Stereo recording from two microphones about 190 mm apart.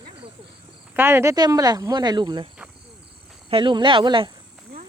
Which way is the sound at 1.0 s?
10° right (ahead or behind).